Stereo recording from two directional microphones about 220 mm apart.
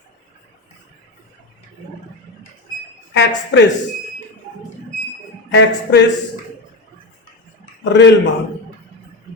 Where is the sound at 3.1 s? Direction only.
50° left (ahead or behind).